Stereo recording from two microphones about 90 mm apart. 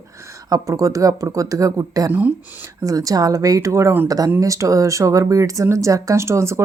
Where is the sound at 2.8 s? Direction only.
40° right (ahead or behind).